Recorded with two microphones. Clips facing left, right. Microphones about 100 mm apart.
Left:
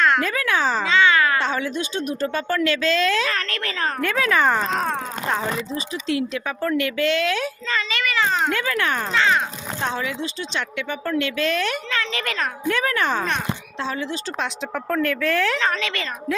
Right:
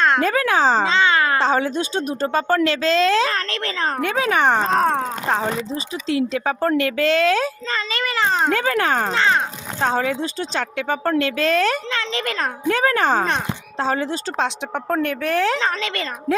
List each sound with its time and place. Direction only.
0.0 s a child's voice: 30° right (ahead or behind)
14.3 s speech: 30° right (ahead or behind)